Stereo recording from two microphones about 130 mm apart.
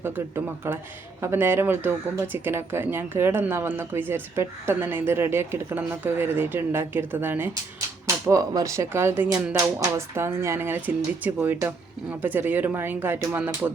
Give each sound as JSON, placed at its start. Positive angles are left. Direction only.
{"t": 0.0, "sound": "speech", "side_deg": -20}
{"t": 8.0, "sound": "speech", "side_deg": -25}